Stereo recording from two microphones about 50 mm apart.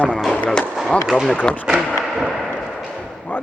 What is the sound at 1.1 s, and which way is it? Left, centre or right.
Speech, centre.